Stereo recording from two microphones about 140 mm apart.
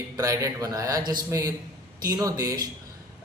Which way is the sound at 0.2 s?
20° right (ahead or behind).